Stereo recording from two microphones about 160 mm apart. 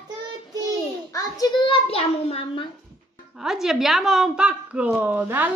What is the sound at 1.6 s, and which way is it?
Child singing, 35° left (ahead or behind).